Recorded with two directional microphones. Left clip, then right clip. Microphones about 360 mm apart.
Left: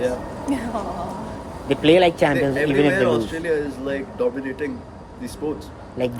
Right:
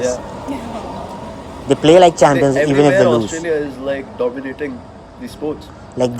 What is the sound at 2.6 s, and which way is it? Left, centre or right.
Speech, centre.